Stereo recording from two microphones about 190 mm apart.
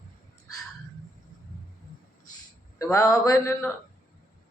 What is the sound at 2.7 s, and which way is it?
Speech, 15° left (ahead or behind).